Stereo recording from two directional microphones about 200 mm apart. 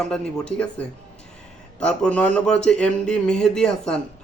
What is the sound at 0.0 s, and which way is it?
Speech, 5° left (ahead or behind).